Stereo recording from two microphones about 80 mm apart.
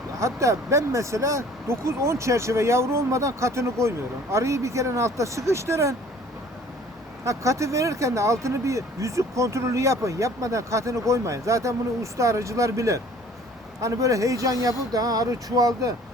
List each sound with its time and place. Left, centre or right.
0.2 s speech: right
7.3 s speech: right